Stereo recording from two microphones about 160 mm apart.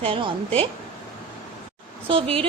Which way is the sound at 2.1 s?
35° right (ahead or behind).